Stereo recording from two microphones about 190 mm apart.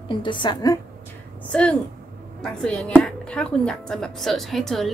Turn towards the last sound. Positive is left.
turn(degrees=0)  # may be behind; listen again after turning